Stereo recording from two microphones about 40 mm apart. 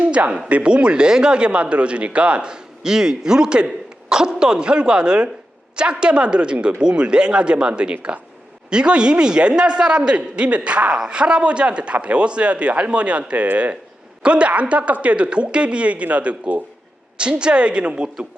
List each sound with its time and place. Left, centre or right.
0.0 s a man's voice: right
17.2 s a man's voice: right